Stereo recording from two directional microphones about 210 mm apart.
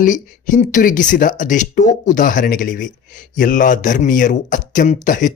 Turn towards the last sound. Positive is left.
turn(degrees=40)  # may be behind; listen again after turning